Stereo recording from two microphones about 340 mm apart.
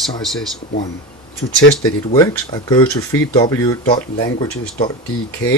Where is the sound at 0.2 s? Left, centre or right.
Centre.